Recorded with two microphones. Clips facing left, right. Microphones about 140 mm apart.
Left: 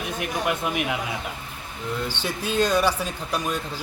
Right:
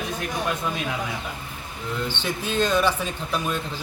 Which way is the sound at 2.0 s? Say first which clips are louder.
Even; 10° left (ahead or behind).